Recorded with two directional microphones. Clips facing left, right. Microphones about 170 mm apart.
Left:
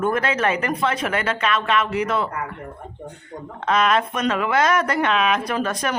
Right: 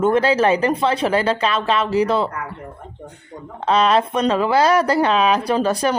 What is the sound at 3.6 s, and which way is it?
Speech, 30° right (ahead or behind).